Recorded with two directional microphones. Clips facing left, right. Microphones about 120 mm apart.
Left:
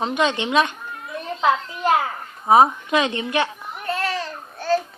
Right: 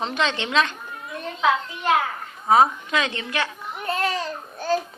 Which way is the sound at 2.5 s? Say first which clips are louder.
Left 3 dB; 25° left (ahead or behind).